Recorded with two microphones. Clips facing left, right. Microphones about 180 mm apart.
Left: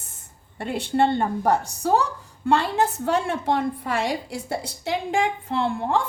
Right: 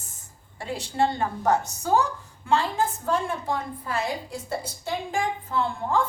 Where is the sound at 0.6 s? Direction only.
60° left (ahead or behind).